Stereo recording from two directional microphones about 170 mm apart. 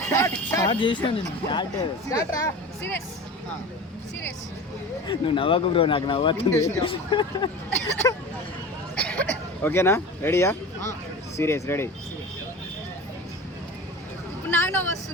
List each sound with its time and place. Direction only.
0.0 s speech: 20° left (ahead or behind)
2.0 s speech: 20° left (ahead or behind)
5.0 s speech: 30° left (ahead or behind)
7.1 s speech: 25° left (ahead or behind)
9.0 s speech: 10° left (ahead or behind)
14.5 s speech: 15° left (ahead or behind)